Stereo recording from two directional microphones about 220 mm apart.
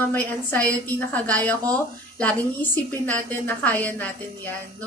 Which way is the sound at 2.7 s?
10° left (ahead or behind).